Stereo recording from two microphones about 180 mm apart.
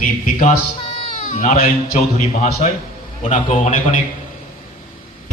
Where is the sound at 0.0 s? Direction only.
45° left (ahead or behind).